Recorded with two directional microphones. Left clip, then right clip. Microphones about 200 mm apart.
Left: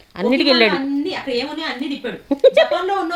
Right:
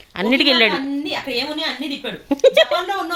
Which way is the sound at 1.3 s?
40° right (ahead or behind).